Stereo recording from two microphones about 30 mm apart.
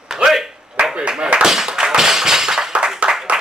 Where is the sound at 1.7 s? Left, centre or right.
Right.